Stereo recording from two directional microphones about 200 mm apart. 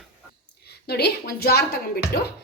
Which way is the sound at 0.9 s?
50° left (ahead or behind).